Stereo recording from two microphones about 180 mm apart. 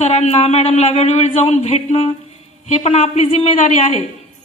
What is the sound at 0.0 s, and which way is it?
A woman's voice, 40° left (ahead or behind).